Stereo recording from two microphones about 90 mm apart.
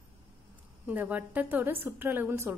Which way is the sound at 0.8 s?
15° right (ahead or behind).